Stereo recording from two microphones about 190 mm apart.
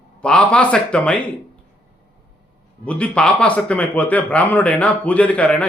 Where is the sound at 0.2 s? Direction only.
5° left (ahead or behind).